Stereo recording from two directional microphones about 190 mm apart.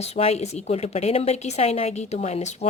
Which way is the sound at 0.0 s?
35° left (ahead or behind).